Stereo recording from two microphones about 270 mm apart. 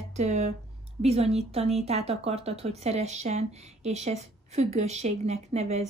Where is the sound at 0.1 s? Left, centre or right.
Right.